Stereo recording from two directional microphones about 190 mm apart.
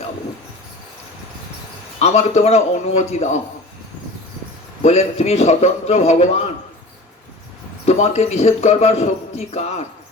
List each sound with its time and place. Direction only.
2.0 s a man's voice: 35° left (ahead or behind)
4.8 s a man's voice: 35° left (ahead or behind)
7.9 s a man's voice: 35° left (ahead or behind)